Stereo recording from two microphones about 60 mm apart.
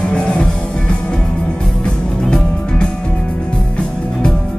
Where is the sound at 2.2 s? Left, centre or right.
Centre.